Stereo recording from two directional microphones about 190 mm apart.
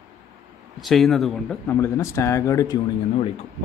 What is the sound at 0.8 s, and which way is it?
Speech, centre (ahead or behind).